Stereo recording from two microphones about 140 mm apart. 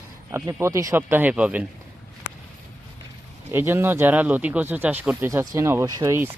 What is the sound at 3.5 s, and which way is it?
Speech, 20° right (ahead or behind).